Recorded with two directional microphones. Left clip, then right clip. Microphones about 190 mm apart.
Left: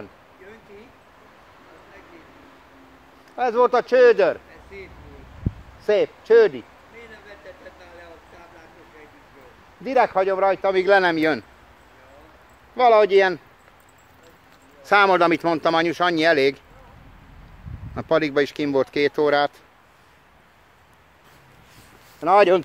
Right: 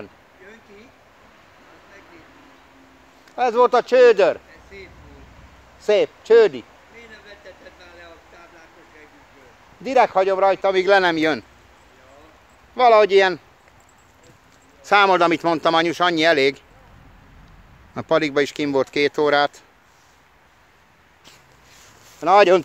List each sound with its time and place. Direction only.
3.3 s speech: 20° right (ahead or behind)
4.7 s speech: 55° right (ahead or behind)
5.8 s speech: 20° right (ahead or behind)
7.0 s a sound: 50° right (ahead or behind)
9.8 s speech: 15° right (ahead or behind)
12.7 s speech: 20° right (ahead or behind)
14.8 s speech: 10° right (ahead or behind)
17.9 s speech: 15° right (ahead or behind)
22.2 s speech: 15° right (ahead or behind)